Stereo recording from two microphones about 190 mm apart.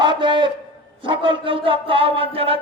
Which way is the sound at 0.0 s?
25° right (ahead or behind).